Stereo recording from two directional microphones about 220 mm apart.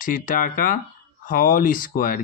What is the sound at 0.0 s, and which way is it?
Speech, 35° left (ahead or behind).